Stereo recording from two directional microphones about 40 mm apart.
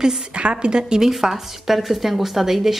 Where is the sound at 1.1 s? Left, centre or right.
Centre.